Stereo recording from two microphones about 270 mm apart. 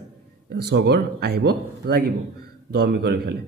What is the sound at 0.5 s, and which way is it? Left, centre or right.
A man's voice, right.